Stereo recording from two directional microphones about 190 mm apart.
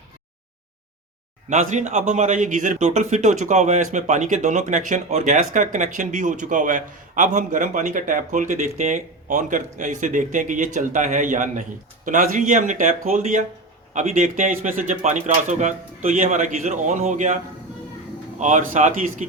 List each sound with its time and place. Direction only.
1.5 s speech: 40° right (ahead or behind)